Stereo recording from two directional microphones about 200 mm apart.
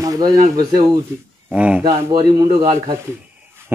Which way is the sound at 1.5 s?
5° right (ahead or behind).